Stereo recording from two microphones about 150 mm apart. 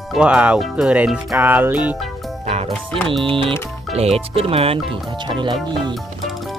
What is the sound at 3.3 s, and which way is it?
Speech, 35° right (ahead or behind).